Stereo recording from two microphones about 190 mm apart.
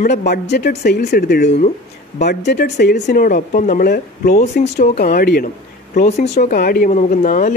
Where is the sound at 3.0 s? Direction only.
45° left (ahead or behind).